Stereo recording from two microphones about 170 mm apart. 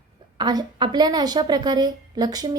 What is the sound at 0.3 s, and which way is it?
A woman's voice, 25° right (ahead or behind).